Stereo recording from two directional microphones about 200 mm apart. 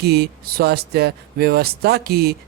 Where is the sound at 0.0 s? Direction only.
55° right (ahead or behind).